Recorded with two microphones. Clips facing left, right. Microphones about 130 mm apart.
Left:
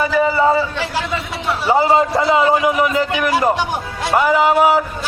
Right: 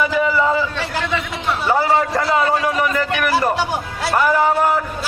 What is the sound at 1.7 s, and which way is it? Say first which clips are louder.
A man's voice: left 4 dB; 20° left (ahead or behind).